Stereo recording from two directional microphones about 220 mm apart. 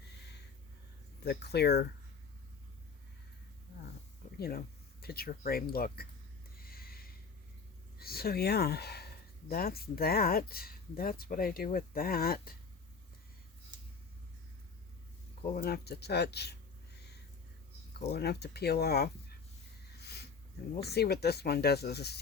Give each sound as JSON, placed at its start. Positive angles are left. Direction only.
{"t": 1.2, "sound": "speech", "side_deg": 50}
{"t": 4.4, "sound": "speech", "side_deg": 45}
{"t": 6.6, "sound": "a sound", "side_deg": 45}
{"t": 7.9, "sound": "speech", "side_deg": 45}
{"t": 15.5, "sound": "speech", "side_deg": 45}
{"t": 20.0, "sound": "a sound", "side_deg": 45}
{"t": 20.7, "sound": "speech", "side_deg": 45}